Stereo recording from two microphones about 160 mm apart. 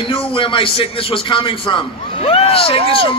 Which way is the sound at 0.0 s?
35° left (ahead or behind).